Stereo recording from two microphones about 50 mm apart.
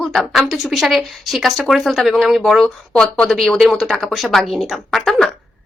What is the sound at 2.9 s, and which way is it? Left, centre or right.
Speech, centre.